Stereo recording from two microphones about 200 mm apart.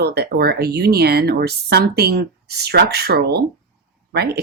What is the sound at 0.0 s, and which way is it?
Speech, 55° right (ahead or behind).